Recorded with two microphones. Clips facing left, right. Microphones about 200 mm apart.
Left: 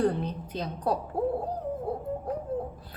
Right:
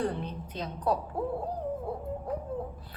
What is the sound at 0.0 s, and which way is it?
Speech, 35° left (ahead or behind).